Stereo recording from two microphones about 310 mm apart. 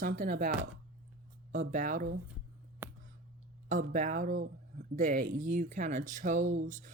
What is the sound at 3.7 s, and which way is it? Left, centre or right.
Speech, right.